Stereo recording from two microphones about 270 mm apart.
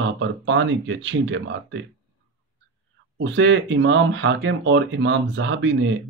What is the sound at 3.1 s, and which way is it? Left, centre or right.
Speech, right.